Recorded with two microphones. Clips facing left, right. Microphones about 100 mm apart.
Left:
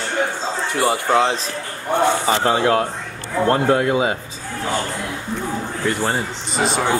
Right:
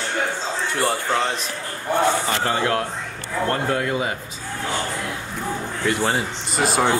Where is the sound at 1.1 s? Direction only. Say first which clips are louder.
Left 6 dB; 20° left (ahead or behind).